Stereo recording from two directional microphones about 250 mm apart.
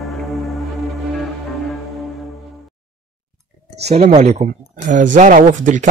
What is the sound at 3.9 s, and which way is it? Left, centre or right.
Speech, right.